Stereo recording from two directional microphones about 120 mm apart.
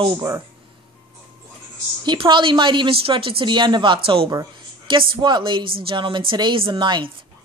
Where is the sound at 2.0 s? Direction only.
45° right (ahead or behind).